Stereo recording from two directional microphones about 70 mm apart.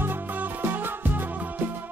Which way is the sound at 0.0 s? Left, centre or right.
Right.